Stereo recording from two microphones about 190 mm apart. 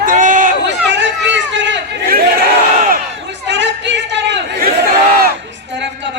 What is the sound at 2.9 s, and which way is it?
Chatter, 65° right (ahead or behind).